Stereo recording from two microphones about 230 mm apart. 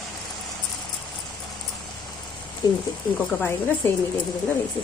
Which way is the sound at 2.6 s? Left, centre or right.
Centre.